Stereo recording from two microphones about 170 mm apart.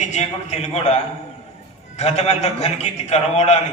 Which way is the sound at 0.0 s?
40° left (ahead or behind).